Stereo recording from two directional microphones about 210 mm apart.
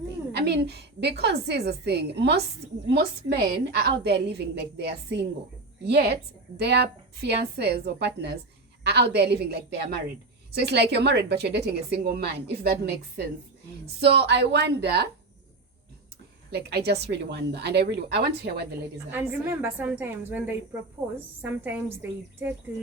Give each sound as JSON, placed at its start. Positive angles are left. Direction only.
{"t": 0.3, "sound": "a woman's voice", "side_deg": -50}
{"t": 16.5, "sound": "a woman's voice", "side_deg": -50}
{"t": 19.1, "sound": "a woman's voice", "side_deg": -10}
{"t": 21.6, "sound": "a woman's voice", "side_deg": -10}